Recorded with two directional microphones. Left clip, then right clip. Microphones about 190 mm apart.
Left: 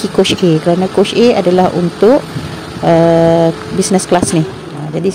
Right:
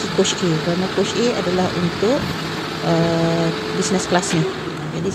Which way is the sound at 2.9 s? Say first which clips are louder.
Left 11 dB; 40° left (ahead or behind).